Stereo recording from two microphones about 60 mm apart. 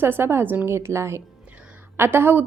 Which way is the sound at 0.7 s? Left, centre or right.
Right.